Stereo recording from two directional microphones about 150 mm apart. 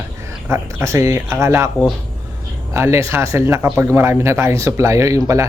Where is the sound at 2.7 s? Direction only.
15° right (ahead or behind).